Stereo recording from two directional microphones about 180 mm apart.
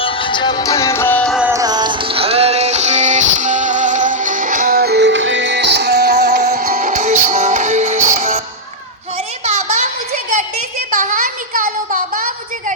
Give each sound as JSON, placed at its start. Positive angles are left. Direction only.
{"t": 0.0, "sound": "music", "side_deg": 30}
{"t": 1.4, "sound": "music", "side_deg": -10}
{"t": 1.6, "sound": "music", "side_deg": -25}
{"t": 6.7, "sound": "music", "side_deg": -40}
{"t": 9.4, "sound": "a sound", "side_deg": -40}